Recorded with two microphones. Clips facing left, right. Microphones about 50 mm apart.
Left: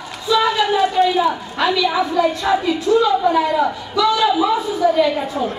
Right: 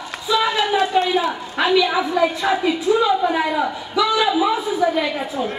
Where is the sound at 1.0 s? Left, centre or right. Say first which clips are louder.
Left 3 dB; right.